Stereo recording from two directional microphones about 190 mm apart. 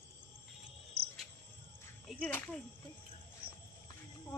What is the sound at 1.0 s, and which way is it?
Cricket, 55° right (ahead or behind).